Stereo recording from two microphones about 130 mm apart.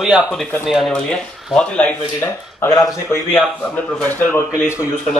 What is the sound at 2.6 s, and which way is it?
Speech, 25° left (ahead or behind).